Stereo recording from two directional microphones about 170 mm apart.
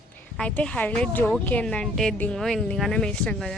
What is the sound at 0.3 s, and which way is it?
Speech, 5° left (ahead or behind).